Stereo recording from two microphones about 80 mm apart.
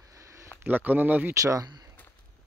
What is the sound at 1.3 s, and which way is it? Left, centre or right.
Speech, right.